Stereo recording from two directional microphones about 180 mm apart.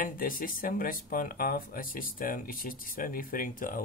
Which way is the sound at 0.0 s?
50° left (ahead or behind).